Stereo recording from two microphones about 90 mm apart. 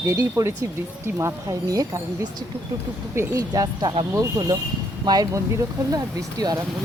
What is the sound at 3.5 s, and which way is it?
Speech, 50° right (ahead or behind).